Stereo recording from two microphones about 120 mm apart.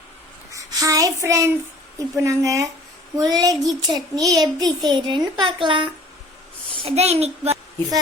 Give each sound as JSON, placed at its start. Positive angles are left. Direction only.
{"t": 0.5, "sound": "child singing", "side_deg": -30}
{"t": 2.1, "sound": "a child's voice", "side_deg": -25}
{"t": 6.7, "sound": "a woman's voice", "side_deg": -55}